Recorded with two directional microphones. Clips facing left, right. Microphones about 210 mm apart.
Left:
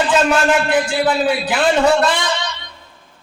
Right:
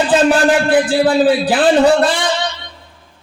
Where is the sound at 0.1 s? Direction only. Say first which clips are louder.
Right 5 dB; 35° right (ahead or behind).